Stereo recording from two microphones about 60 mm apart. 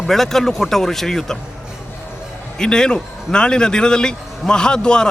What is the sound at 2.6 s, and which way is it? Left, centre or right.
A man's voice, centre.